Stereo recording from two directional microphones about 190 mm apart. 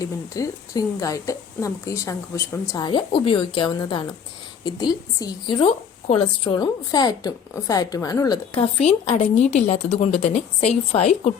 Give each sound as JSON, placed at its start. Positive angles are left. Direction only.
{"t": 0.0, "sound": "a woman's voice", "side_deg": 15}
{"t": 8.5, "sound": "a woman's voice", "side_deg": 35}